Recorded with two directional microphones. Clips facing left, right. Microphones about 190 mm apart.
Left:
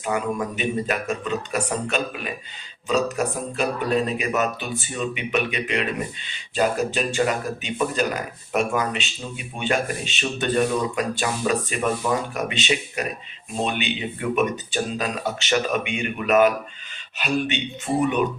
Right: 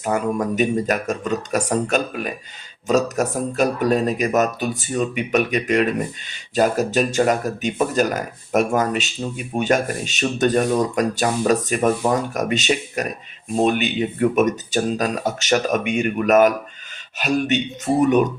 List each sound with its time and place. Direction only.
0.0 s speech: 40° right (ahead or behind)